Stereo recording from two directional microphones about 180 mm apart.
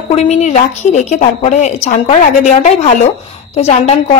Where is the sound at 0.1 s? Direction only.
40° left (ahead or behind).